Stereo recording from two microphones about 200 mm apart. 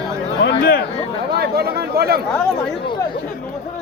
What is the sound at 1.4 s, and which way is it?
Speech, 50° right (ahead or behind).